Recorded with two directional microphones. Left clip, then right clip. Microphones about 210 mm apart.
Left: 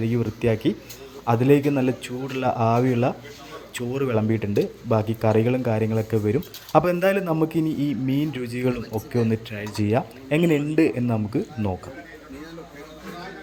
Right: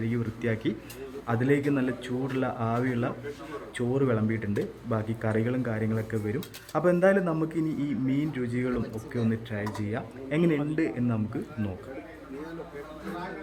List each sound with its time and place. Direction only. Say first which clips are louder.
0.0 s speech: left 7 dB; 15° left (ahead or behind)